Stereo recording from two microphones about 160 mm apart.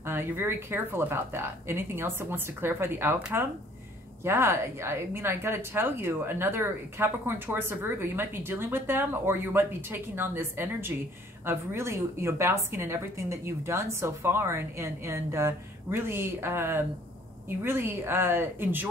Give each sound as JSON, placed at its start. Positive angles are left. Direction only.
{"t": 0.0, "sound": "a woman's voice", "side_deg": -15}